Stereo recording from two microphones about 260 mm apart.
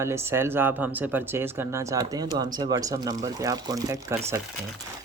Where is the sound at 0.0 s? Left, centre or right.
Centre.